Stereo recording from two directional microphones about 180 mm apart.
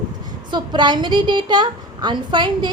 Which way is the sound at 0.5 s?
25° right (ahead or behind).